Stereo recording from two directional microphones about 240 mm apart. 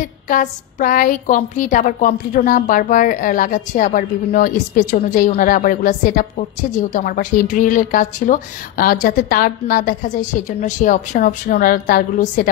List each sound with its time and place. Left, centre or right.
0.0 s a woman's voice: left